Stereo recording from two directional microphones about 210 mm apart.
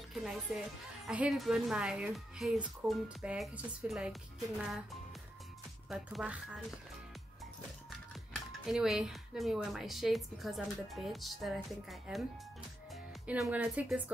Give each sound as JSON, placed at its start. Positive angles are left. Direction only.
{"t": 0.1, "sound": "a woman's voice", "side_deg": 0}
{"t": 5.9, "sound": "a woman's voice", "side_deg": 0}
{"t": 8.6, "sound": "a woman's voice", "side_deg": 0}